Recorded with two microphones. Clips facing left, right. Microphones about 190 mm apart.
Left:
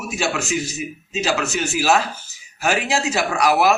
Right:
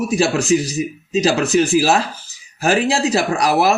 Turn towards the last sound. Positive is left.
turn(degrees=-35)  # may be behind; listen again after turning